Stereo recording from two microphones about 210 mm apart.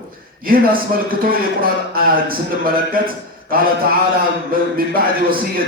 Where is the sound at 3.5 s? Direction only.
45° right (ahead or behind).